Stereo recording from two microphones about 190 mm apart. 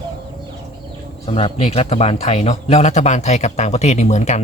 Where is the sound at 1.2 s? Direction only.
30° left (ahead or behind).